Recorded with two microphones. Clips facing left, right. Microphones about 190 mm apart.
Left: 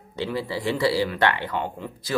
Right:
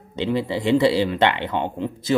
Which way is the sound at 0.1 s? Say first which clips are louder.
Right 5 dB; 20° right (ahead or behind).